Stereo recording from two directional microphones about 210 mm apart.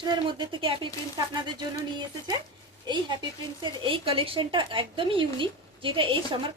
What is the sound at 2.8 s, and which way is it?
Speech, 20° right (ahead or behind).